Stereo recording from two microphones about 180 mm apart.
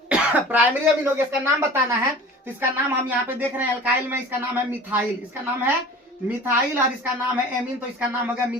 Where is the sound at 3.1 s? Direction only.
10° right (ahead or behind).